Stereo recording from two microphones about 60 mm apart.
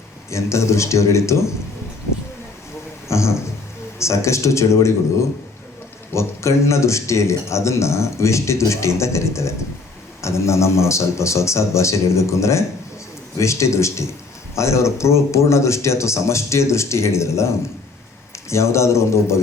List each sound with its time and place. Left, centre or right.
0.3 s a man's voice: left
3.1 s a man's voice: left
6.1 s a man's voice: left